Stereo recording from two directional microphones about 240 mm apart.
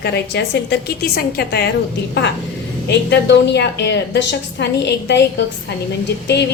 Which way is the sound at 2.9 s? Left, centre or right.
Left.